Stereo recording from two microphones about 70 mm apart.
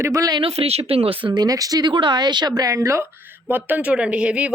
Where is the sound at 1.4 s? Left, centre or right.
Right.